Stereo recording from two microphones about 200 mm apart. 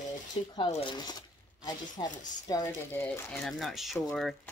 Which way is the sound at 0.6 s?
20° left (ahead or behind).